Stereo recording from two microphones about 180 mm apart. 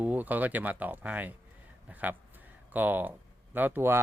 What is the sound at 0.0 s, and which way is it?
Speech, 10° right (ahead or behind).